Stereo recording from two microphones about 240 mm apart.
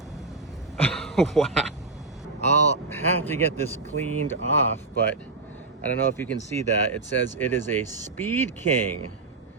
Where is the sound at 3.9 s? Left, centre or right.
Right.